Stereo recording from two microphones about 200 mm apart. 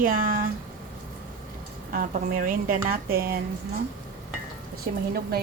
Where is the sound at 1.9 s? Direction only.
45° right (ahead or behind).